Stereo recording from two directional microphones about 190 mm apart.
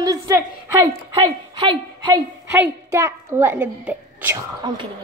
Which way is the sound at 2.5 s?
10° right (ahead or behind).